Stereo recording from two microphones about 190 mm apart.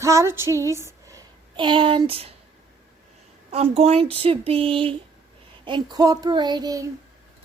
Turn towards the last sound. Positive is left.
turn(degrees=-20)  # may be behind; listen again after turning